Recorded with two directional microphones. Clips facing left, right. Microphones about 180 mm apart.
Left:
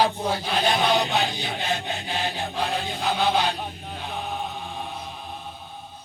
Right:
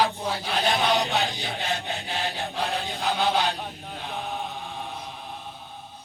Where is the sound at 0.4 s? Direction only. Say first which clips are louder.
Left 1 dB; 15° left (ahead or behind).